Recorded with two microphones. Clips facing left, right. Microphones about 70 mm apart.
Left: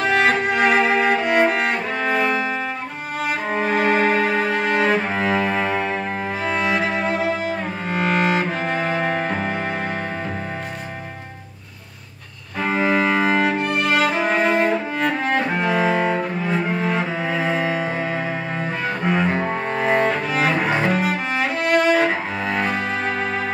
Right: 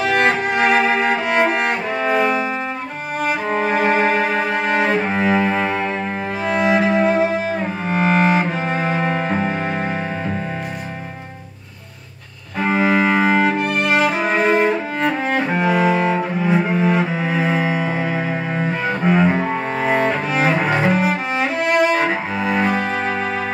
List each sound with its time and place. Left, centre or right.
0.0 s music: centre
3.5 s cello: centre
6.4 s music: centre
7.9 s cello: right
8.4 s music: centre
12.5 s music: centre
20.3 s cello: centre